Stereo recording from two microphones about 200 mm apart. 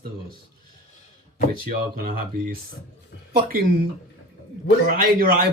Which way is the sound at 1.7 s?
45° right (ahead or behind).